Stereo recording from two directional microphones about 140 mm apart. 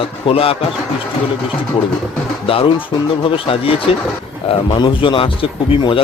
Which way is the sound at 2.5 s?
40° left (ahead or behind).